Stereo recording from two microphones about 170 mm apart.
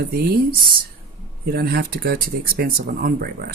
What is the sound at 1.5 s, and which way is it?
Speech, 65° right (ahead or behind).